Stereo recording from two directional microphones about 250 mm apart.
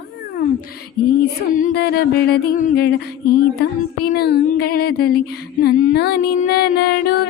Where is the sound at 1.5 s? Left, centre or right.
Left.